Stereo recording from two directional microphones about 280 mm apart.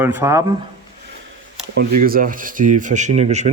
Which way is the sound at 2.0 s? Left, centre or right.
Right.